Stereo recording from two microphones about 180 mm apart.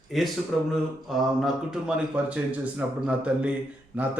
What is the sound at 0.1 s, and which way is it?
Speech, centre (ahead or behind).